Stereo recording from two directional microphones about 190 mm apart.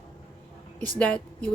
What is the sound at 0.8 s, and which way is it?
Speech, 5° left (ahead or behind).